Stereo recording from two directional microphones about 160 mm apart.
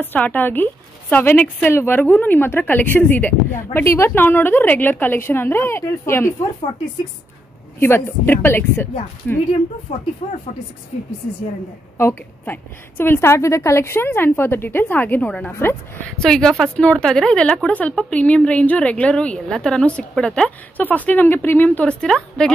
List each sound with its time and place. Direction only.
0.0 s a woman's voice: 10° left (ahead or behind)
7.8 s a woman's voice: 15° left (ahead or behind)
9.9 s speech: 40° left (ahead or behind)
12.0 s a woman's voice: 15° left (ahead or behind)